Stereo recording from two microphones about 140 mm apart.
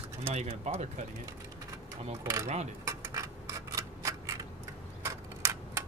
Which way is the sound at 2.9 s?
20° right (ahead or behind).